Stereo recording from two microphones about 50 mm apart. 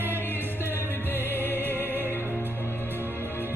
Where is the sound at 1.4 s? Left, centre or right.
Left.